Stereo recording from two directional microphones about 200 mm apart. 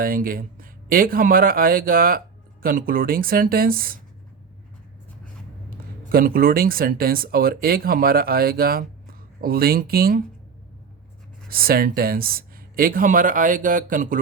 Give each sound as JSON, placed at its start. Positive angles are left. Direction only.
{"t": 0.0, "sound": "speech", "side_deg": -45}
{"t": 5.7, "sound": "speech", "side_deg": -45}
{"t": 11.4, "sound": "speech", "side_deg": -45}